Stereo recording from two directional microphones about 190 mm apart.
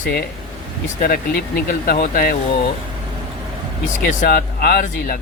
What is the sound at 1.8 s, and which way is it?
Speech, 50° left (ahead or behind).